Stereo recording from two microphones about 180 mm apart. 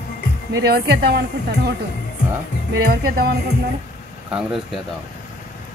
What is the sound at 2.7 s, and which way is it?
Speech, 65° right (ahead or behind).